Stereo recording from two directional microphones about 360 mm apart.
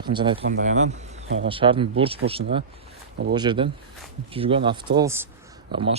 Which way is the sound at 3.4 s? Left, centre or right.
Centre.